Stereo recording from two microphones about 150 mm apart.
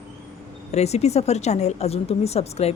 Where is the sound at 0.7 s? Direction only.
45° left (ahead or behind).